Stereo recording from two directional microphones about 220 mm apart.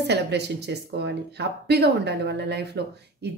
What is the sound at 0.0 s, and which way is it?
Speech, 50° right (ahead or behind).